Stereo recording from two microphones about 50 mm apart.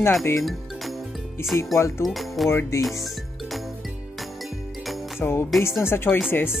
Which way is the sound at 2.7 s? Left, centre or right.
Left.